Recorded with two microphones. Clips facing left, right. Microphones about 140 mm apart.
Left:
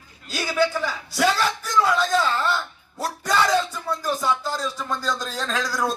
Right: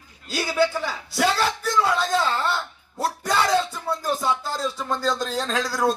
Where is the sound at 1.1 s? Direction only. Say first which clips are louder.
Even; 30° right (ahead or behind).